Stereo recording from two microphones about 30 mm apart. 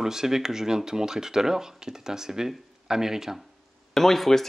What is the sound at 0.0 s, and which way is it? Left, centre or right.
Speech, centre.